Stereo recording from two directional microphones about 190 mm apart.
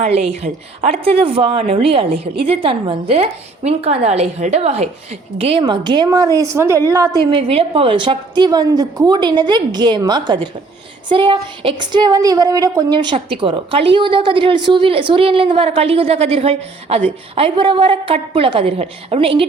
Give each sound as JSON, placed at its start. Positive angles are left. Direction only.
{"t": 0.0, "sound": "a woman's voice", "side_deg": -35}